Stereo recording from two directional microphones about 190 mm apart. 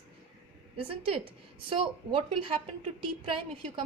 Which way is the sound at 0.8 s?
30° right (ahead or behind).